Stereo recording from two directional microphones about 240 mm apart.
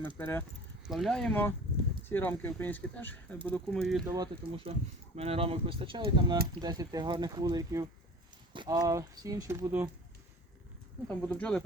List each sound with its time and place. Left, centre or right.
0.2 s speech: centre
4.0 s speech: centre
11.1 s speech: centre